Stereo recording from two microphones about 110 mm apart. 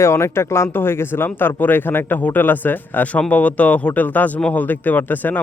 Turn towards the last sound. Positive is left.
turn(degrees=15)  # may be behind; listen again after turning